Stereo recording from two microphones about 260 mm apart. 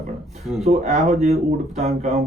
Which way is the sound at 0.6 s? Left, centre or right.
Right.